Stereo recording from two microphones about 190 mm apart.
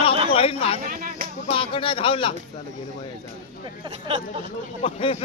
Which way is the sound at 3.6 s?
25° right (ahead or behind).